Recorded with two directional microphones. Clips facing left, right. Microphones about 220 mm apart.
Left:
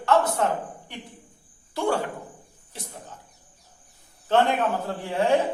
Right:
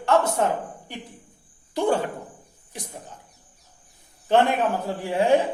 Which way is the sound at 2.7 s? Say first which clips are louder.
Right 3 dB; 15° right (ahead or behind).